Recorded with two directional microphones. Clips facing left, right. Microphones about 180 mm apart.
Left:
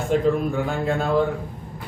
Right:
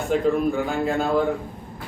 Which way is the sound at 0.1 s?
Centre (ahead or behind).